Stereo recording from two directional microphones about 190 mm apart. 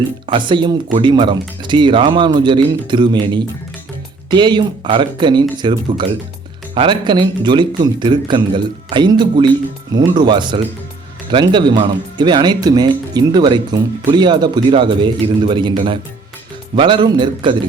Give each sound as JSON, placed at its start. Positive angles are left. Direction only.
{"t": 0.3, "sound": "speech", "side_deg": -25}